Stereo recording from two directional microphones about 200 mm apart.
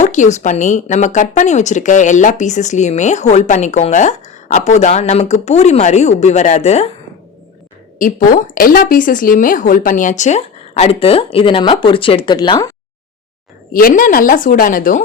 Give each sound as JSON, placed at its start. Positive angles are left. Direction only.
{"t": 0.0, "sound": "speech", "side_deg": 35}
{"t": 7.9, "sound": "speech", "side_deg": 40}
{"t": 13.7, "sound": "a woman's voice", "side_deg": 45}